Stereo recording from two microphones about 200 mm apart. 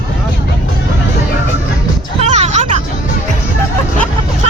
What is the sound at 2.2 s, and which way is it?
Music, 35° right (ahead or behind).